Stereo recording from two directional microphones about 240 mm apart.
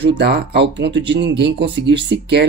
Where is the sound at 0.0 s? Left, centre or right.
Right.